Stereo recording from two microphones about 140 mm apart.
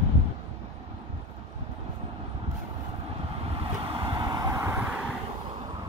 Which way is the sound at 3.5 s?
40° right (ahead or behind).